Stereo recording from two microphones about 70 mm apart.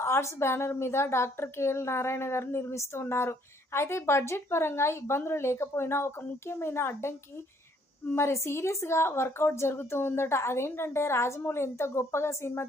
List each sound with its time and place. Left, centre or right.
0.0 s a woman's voice: left
8.1 s a woman's voice: left